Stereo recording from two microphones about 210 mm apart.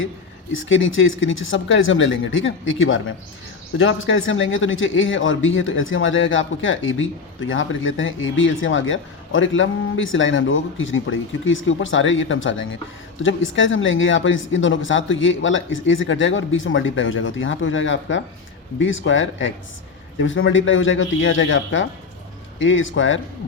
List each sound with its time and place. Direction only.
0.5 s a man's voice: 65° left (ahead or behind)